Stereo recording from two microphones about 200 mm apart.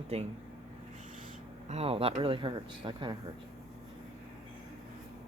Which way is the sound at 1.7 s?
30° right (ahead or behind).